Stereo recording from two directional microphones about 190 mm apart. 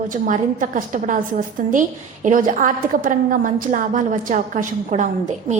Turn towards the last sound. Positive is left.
turn(degrees=-40)  # may be behind; listen again after turning